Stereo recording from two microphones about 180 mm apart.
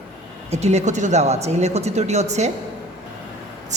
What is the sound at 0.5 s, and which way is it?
Speech, 35° right (ahead or behind).